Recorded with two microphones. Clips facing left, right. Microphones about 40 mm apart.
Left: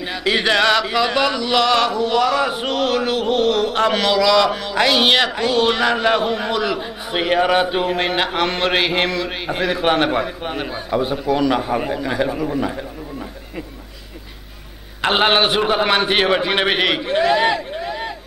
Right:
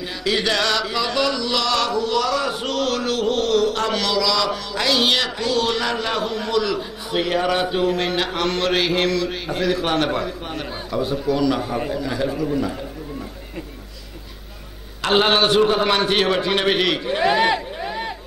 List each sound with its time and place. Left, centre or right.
0.2 s chant: left
15.0 s chant: left
17.5 s a sound: centre